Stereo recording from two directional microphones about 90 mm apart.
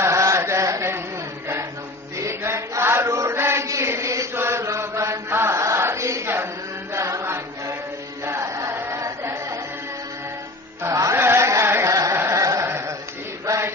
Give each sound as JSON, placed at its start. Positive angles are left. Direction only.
{"t": 0.0, "sound": "chant", "side_deg": -30}
{"t": 2.1, "sound": "chant", "side_deg": -30}
{"t": 10.9, "sound": "music", "side_deg": -40}
{"t": 11.1, "sound": "a sound", "side_deg": -30}
{"t": 12.2, "sound": "carnatic music", "side_deg": -35}
{"t": 13.5, "sound": "chant", "side_deg": -30}